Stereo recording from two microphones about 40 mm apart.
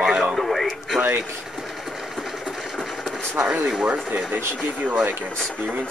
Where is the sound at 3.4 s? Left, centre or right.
Right.